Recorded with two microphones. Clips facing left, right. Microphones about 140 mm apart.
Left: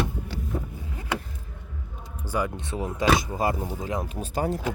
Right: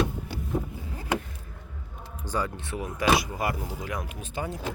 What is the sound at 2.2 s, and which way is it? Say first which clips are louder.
Speech: left 2 dB; 10° left (ahead or behind).